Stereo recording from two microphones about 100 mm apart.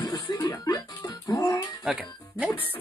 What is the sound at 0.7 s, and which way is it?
Music, 40° left (ahead or behind).